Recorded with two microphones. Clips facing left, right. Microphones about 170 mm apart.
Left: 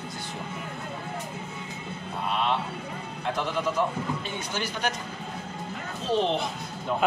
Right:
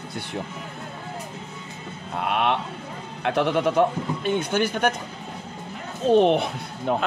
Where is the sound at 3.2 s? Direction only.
65° right (ahead or behind).